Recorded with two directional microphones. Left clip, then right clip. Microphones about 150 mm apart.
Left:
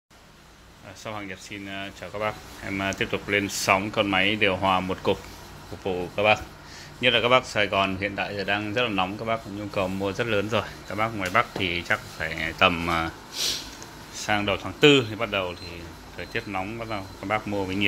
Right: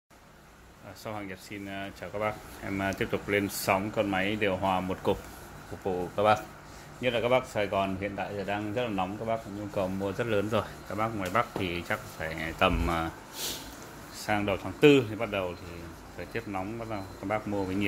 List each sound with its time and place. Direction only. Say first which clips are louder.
1.0 s speech: left 4 dB; 15° right (ahead or behind)
3.7 s a man's voice: left 6 dB; 5° left (ahead or behind); by 6.4 s 15° right (ahead or behind)
7.0 s a man's voice: left 6 dB; 10° left (ahead or behind)